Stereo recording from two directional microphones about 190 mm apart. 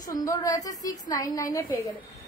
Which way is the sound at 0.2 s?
20° left (ahead or behind).